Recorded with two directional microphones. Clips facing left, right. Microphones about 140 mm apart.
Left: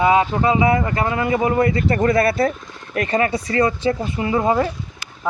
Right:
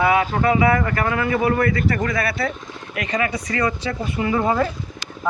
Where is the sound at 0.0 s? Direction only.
25° left (ahead or behind).